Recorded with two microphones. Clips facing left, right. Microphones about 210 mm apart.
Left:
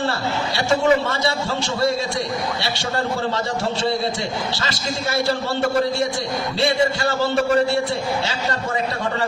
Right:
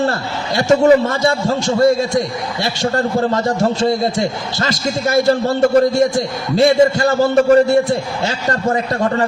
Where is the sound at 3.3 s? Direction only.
45° right (ahead or behind).